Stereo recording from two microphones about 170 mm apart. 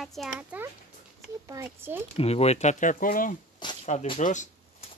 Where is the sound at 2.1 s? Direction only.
35° left (ahead or behind); by 3.4 s 55° left (ahead or behind).